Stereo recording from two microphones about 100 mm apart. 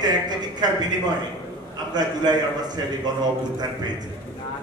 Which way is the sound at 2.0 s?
45° right (ahead or behind).